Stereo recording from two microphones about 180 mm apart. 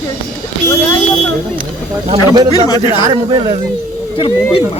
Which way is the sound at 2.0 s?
25° right (ahead or behind).